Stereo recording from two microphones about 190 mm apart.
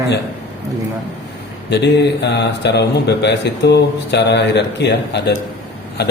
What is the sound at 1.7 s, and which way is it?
Speech, 65° left (ahead or behind).